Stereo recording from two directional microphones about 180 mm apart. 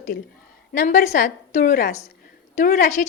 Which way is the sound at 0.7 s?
45° left (ahead or behind).